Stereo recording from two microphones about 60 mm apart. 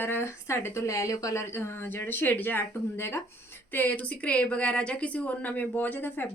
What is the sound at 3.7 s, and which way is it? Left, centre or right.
A woman's voice, left.